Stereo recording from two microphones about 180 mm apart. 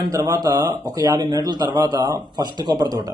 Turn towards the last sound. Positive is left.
turn(degrees=-20)  # may be behind; listen again after turning